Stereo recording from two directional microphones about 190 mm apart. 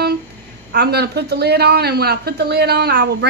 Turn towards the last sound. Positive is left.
turn(degrees=-60)  # may be behind; listen again after turning